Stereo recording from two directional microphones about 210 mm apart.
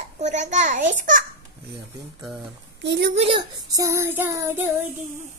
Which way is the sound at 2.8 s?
55° right (ahead or behind).